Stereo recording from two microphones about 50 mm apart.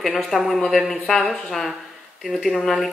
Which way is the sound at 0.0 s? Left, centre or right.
Centre.